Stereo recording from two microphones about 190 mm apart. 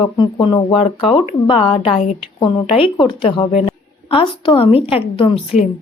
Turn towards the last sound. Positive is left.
turn(degrees=30)  # may be behind; listen again after turning